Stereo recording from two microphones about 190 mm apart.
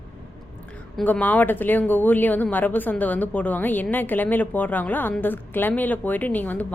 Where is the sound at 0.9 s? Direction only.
10° left (ahead or behind).